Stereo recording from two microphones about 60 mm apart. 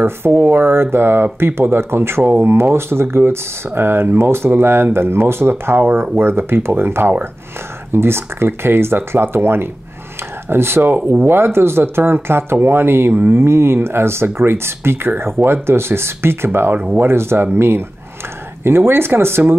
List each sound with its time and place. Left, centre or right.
0.3 s speech: right